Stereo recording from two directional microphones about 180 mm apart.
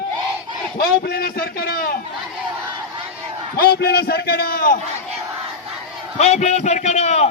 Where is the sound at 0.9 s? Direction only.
55° left (ahead or behind).